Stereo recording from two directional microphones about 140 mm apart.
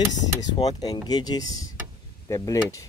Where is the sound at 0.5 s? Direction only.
30° left (ahead or behind).